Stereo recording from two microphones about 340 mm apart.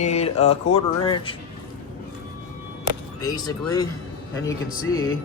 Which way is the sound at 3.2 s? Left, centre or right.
Centre.